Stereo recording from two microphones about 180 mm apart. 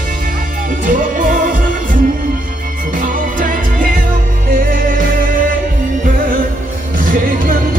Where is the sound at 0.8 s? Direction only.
50° right (ahead or behind).